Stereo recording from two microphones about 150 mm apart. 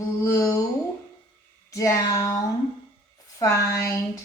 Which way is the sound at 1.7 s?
20° left (ahead or behind).